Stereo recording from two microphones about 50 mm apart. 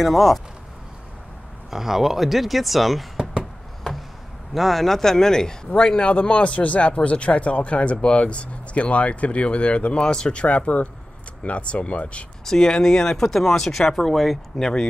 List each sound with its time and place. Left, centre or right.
0.0 s speech: centre
1.7 s speech: centre
3.9 s a sound: centre
4.6 s speech: centre; by 12.3 s left
12.4 s speech: centre
14.6 s speech: centre